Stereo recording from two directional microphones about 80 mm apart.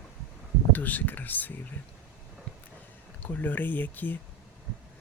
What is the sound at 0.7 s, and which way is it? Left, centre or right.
Speech, left.